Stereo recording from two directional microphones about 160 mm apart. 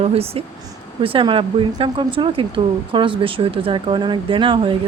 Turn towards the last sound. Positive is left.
turn(degrees=-30)  # may be behind; listen again after turning